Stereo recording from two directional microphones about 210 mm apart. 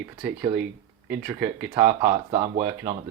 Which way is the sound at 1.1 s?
10° right (ahead or behind).